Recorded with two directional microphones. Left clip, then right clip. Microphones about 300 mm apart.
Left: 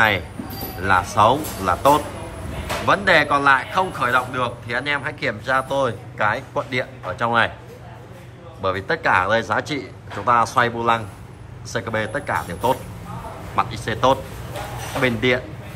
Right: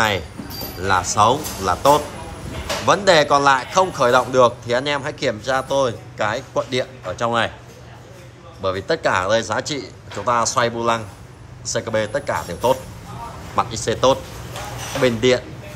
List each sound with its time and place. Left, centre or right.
0.8 s a man's voice: centre
8.6 s a man's voice: centre